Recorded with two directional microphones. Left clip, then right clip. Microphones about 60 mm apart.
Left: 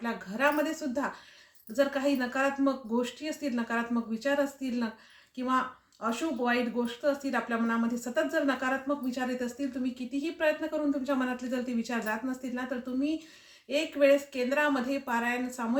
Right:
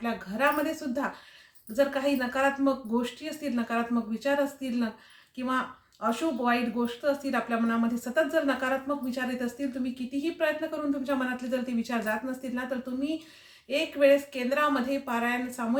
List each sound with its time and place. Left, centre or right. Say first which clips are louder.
0.0 s a woman's voice: right 1 dB; left